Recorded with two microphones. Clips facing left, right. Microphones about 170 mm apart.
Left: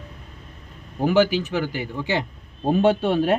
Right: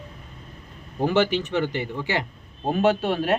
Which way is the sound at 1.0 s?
10° left (ahead or behind).